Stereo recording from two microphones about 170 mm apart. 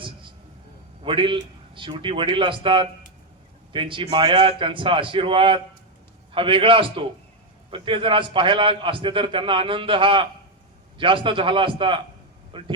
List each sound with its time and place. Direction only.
1.0 s a man's voice: 30° right (ahead or behind)